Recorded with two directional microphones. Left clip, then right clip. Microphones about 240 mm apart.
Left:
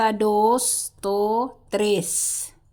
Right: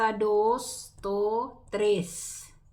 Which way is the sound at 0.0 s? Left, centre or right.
Left.